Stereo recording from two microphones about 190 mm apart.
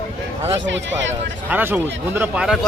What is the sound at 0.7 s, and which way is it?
Speech, 70° right (ahead or behind).